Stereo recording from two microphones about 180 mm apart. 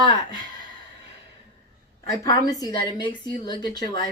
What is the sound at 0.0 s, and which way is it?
Speech, 25° left (ahead or behind).